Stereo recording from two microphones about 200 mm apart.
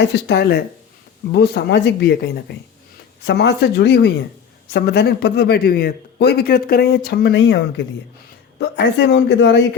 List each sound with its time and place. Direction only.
0.0 s speech: 55° left (ahead or behind)